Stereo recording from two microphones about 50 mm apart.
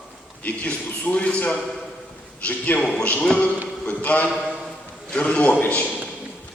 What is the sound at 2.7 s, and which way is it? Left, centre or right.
A man's voice, left.